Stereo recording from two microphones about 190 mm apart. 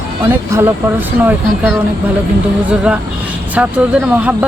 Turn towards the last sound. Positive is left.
turn(degrees=-5)  # may be behind; listen again after turning